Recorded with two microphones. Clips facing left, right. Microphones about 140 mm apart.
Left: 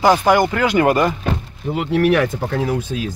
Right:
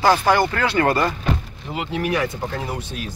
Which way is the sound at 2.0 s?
85° left.